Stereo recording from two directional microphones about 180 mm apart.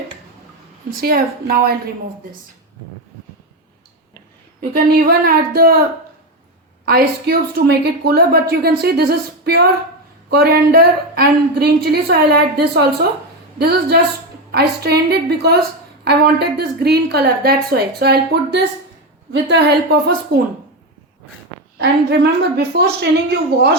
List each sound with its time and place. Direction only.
1.0 s a woman's voice: 55° right (ahead or behind)
4.7 s a woman's voice: 55° right (ahead or behind)
6.8 s a woman's voice: 55° right (ahead or behind)
19.3 s a woman's voice: 75° right (ahead or behind)
21.8 s a woman's voice: 65° right (ahead or behind)